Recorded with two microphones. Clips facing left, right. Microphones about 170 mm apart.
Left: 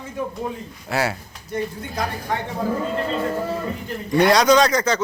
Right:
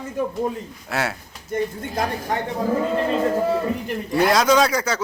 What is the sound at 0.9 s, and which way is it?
Speech, centre (ahead or behind).